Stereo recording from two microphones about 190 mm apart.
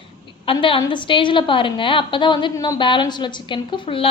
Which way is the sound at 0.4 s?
25° left (ahead or behind).